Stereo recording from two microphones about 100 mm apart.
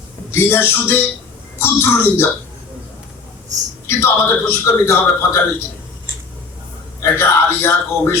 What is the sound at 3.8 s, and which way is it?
Speech, 25° left (ahead or behind).